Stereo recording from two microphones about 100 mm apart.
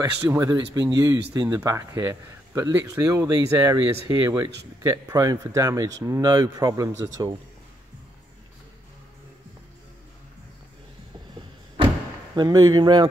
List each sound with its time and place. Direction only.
0.4 s a man's voice: 40° right (ahead or behind)
1.0 s a man's voice: 30° right (ahead or behind)
12.4 s speech: 45° right (ahead or behind)